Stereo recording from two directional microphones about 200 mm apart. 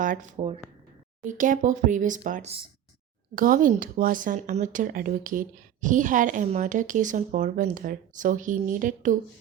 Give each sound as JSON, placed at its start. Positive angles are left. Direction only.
{"t": 0.0, "sound": "speech", "side_deg": -40}
{"t": 3.3, "sound": "speech", "side_deg": -45}